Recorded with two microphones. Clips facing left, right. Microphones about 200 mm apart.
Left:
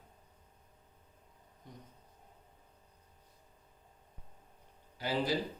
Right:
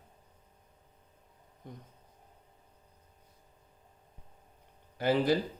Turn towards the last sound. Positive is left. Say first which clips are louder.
# right 7 dB
turn(degrees=-55)  # may be behind; listen again after turning